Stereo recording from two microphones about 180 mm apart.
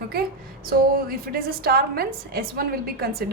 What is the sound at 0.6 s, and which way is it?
A woman's voice, 55° right (ahead or behind).